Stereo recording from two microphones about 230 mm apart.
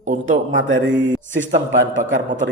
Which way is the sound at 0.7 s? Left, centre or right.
Right.